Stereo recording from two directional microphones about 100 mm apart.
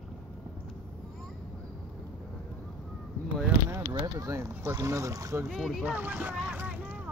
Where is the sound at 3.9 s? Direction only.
35° right (ahead or behind).